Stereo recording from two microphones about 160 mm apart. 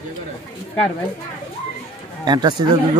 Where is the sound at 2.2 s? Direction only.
25° right (ahead or behind).